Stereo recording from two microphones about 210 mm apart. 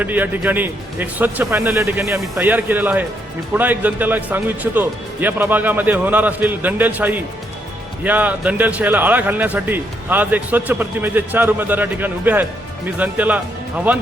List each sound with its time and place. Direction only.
0.0 s a man's voice: 10° right (ahead or behind)